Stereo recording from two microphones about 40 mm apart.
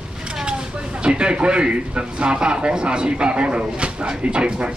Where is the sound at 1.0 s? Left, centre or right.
Right.